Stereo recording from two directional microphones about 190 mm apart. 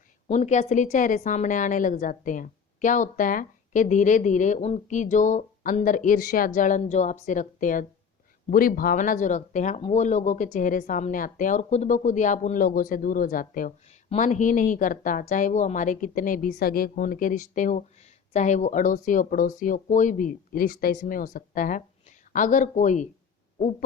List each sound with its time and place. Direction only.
0.3 s a woman's voice: 35° left (ahead or behind)